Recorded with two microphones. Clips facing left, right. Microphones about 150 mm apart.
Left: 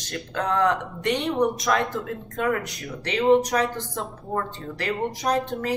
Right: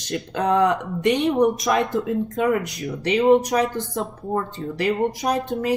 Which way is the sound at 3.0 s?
15° right (ahead or behind).